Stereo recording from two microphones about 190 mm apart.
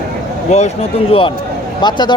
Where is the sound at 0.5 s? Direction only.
35° left (ahead or behind).